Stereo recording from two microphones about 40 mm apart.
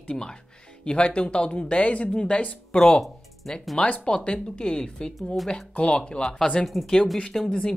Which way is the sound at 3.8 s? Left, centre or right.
Left.